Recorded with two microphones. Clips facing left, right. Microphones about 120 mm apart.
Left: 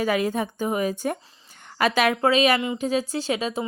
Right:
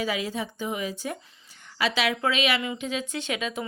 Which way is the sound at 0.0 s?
50° left (ahead or behind).